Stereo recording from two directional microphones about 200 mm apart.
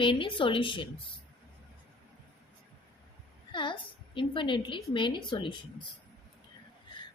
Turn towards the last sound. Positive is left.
turn(degrees=25)  # may be behind; listen again after turning